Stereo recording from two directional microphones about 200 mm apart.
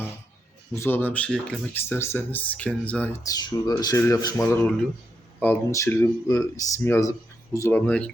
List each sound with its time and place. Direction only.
0.7 s speech: 10° left (ahead or behind)
3.2 s speech: 20° left (ahead or behind)